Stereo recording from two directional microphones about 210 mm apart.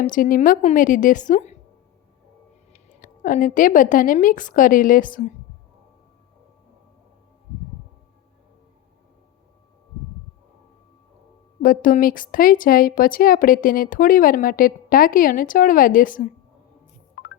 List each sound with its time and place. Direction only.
0.0 s speech: 40° left (ahead or behind)
2.7 s a woman's voice: 40° left (ahead or behind)
11.6 s speech: 40° left (ahead or behind)